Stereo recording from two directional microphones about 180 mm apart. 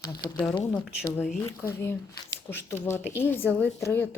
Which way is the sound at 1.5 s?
15° left (ahead or behind).